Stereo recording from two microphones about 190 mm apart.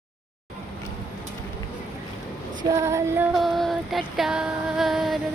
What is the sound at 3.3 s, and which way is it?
Music, centre (ahead or behind).